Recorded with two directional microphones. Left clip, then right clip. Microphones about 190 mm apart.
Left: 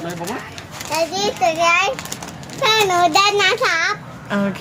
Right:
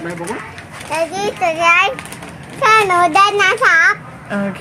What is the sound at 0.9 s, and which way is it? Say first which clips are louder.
A child's voice: right 1 dB; centre (ahead or behind).